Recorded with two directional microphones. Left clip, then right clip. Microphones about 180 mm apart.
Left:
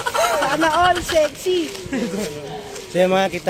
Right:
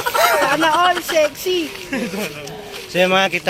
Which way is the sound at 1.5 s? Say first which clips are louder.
Even; 45° right (ahead or behind).